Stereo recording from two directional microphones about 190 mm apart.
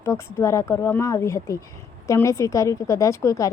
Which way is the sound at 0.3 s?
15° left (ahead or behind).